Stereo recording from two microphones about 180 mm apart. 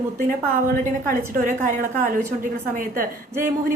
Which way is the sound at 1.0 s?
45° right (ahead or behind).